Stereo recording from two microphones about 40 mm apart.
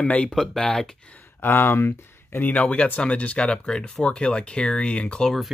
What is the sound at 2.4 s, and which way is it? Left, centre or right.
Speech, left.